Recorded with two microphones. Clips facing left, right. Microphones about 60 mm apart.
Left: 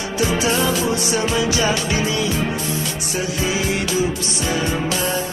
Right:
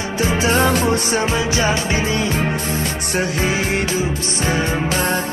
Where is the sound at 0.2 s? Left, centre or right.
Right.